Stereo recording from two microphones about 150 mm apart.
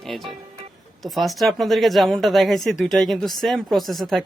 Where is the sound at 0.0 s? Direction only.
Centre (ahead or behind).